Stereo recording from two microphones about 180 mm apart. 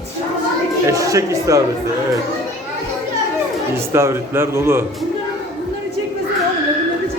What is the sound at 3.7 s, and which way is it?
Speech, 15° right (ahead or behind).